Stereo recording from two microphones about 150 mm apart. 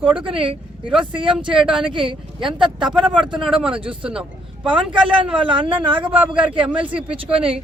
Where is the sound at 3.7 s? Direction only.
35° right (ahead or behind).